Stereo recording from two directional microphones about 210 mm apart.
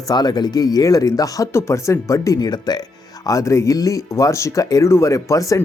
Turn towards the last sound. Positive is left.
turn(degrees=15)  # may be behind; listen again after turning